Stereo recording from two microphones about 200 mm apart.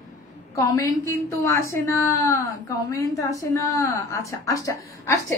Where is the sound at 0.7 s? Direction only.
15° left (ahead or behind).